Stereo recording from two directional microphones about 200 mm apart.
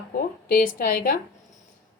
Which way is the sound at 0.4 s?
45° left (ahead or behind).